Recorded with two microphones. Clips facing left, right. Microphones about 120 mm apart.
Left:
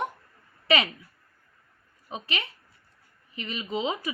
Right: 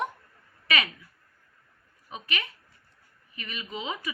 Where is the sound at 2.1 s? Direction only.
30° left (ahead or behind).